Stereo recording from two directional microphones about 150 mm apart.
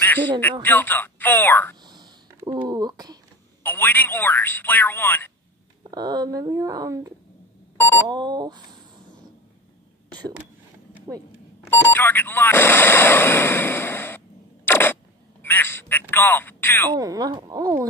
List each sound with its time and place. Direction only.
0.0 s a sound: 15° left (ahead or behind)
0.4 s speech: 10° left (ahead or behind)
1.9 s a sound: 30° right (ahead or behind)
3.6 s speech: 10° left (ahead or behind)
5.9 s speech: 25° right (ahead or behind)
7.7 s beep: 15° left (ahead or behind)
8.1 s speech: 30° right (ahead or behind)
11.7 s speech: 15° left (ahead or behind)
16.9 s speech: 25° right (ahead or behind)